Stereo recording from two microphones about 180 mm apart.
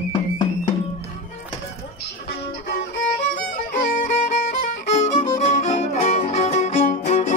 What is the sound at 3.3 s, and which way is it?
Violin, 50° left (ahead or behind).